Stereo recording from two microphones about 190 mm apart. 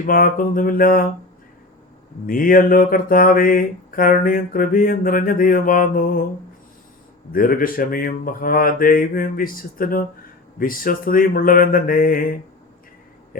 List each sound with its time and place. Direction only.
0.0 s mantra: 45° left (ahead or behind)
2.2 s mantra: 45° left (ahead or behind)
7.3 s mantra: 50° left (ahead or behind)